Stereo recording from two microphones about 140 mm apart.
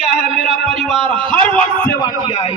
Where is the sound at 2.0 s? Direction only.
40° left (ahead or behind).